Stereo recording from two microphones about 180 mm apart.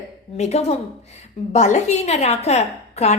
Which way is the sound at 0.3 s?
40° left (ahead or behind).